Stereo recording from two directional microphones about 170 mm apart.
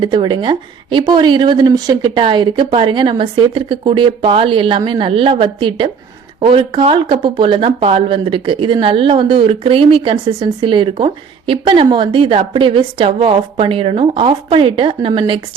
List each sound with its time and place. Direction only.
0.0 s a woman's voice: 30° right (ahead or behind)